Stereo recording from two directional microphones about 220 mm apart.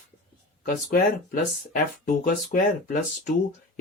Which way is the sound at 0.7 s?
40° left (ahead or behind).